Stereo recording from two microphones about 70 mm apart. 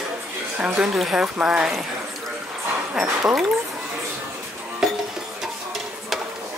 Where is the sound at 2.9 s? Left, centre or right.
Centre.